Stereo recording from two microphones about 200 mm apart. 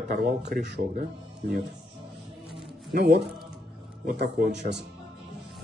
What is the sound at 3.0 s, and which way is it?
Speech, 55° right (ahead or behind).